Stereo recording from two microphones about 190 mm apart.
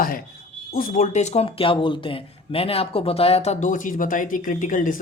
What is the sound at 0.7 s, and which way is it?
Speech, 50° left (ahead or behind).